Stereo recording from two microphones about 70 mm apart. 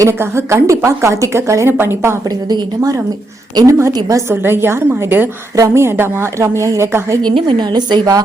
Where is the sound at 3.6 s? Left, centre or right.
Right.